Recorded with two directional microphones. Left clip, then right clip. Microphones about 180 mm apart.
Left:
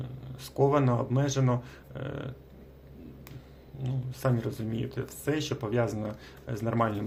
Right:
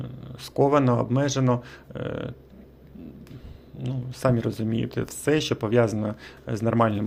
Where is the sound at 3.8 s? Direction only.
35° right (ahead or behind).